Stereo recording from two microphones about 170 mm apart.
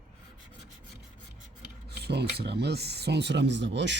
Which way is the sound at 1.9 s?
70° right (ahead or behind).